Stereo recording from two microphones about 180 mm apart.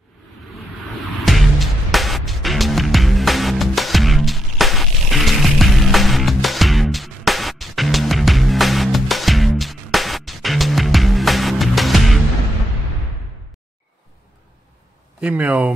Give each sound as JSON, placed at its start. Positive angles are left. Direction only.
{"t": 1.2, "sound": "music", "side_deg": 0}
{"t": 15.1, "sound": "speech", "side_deg": -5}